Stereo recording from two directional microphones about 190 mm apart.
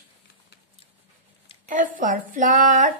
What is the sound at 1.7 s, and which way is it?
Speech, 45° right (ahead or behind).